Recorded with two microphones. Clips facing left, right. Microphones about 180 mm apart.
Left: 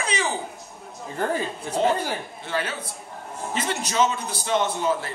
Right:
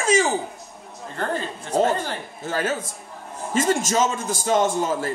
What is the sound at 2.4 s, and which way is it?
A man's voice, 45° right (ahead or behind).